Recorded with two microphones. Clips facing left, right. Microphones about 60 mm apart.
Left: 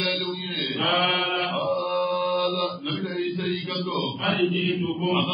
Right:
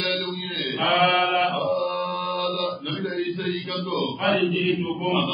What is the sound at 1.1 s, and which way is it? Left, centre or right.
Mantra, right.